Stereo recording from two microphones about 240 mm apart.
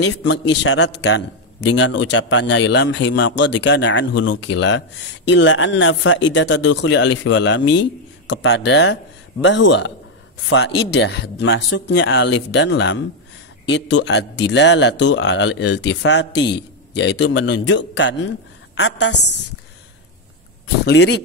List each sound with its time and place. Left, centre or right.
0.0 s a man's voice: left
20.6 s a man's voice: left